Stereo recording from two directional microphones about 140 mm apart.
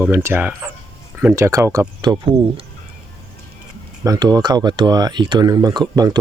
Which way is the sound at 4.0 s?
30° right (ahead or behind).